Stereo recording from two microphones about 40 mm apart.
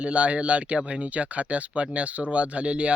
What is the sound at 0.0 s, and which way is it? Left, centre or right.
Speech, right.